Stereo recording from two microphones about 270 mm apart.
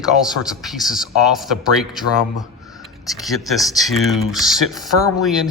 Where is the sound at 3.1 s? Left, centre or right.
Centre.